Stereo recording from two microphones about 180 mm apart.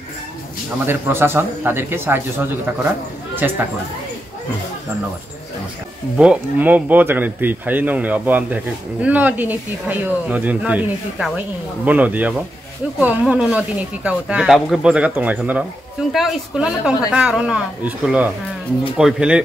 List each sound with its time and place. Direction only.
0.8 s speech: 10° right (ahead or behind)
6.1 s speech: 5° right (ahead or behind)